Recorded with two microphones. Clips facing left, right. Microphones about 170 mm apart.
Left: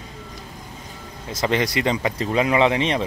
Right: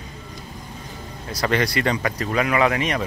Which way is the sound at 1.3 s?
20° left (ahead or behind).